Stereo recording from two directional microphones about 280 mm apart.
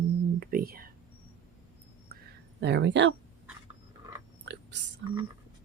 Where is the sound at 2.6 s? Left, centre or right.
Right.